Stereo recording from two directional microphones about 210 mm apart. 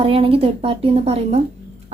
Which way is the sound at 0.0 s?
25° right (ahead or behind).